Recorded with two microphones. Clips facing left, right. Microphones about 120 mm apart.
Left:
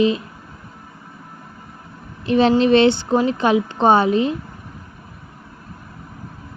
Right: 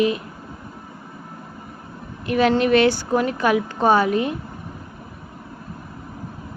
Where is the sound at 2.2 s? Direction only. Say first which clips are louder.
Left 3 dB; 25° left (ahead or behind).